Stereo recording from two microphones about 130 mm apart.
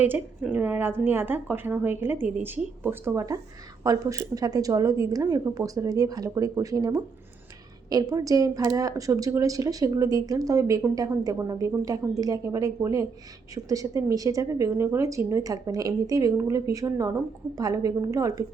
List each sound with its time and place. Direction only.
0.4 s a woman's voice: 10° right (ahead or behind)